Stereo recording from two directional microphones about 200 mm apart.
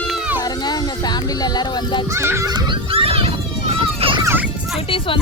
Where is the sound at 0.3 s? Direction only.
20° left (ahead or behind).